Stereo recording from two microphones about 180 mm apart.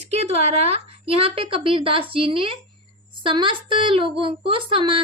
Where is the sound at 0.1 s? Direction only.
35° right (ahead or behind).